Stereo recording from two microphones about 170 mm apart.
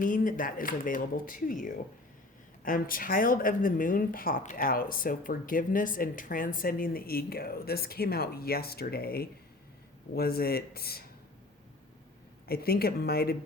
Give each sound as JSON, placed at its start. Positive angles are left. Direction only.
{"t": 0.0, "sound": "speech", "side_deg": 50}
{"t": 12.5, "sound": "speech", "side_deg": 65}